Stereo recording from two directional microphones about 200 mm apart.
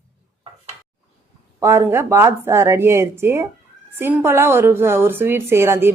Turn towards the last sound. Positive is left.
turn(degrees=-10)  # may be behind; listen again after turning